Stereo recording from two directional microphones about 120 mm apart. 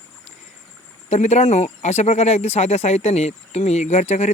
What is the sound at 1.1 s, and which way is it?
Speech, 65° left (ahead or behind).